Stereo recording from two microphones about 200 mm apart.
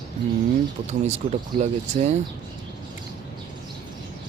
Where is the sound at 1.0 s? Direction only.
35° right (ahead or behind).